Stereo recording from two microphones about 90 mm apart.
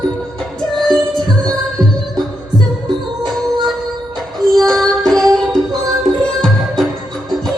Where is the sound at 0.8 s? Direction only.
5° left (ahead or behind).